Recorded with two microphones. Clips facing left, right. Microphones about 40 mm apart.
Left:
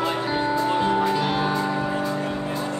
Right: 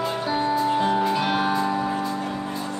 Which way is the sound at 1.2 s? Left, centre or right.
Centre.